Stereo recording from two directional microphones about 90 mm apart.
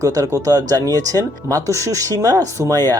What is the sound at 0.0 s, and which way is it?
Speech, 40° right (ahead or behind).